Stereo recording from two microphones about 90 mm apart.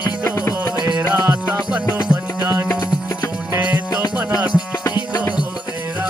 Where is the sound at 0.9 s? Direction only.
20° right (ahead or behind).